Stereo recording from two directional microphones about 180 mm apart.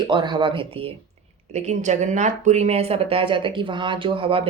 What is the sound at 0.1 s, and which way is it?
Speech, 25° right (ahead or behind).